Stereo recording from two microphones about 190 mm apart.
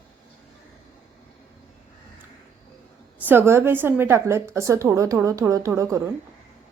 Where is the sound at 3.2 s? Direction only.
10° right (ahead or behind).